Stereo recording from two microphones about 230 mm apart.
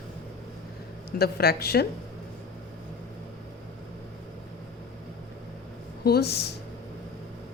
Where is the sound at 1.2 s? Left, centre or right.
Left.